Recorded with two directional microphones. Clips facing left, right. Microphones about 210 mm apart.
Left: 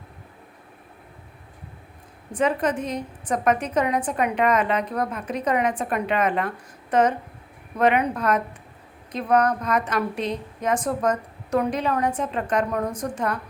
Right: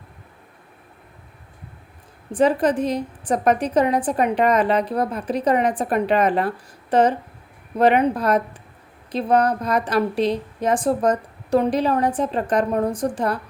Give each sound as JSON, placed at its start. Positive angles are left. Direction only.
{"t": 2.3, "sound": "a woman's voice", "side_deg": -35}